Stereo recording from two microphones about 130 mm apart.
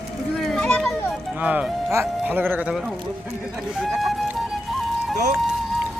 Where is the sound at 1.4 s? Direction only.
10° right (ahead or behind).